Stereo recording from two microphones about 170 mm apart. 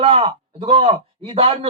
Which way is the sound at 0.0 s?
35° right (ahead or behind).